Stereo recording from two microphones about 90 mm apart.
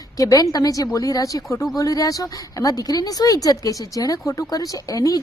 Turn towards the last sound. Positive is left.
turn(degrees=40)  # may be behind; listen again after turning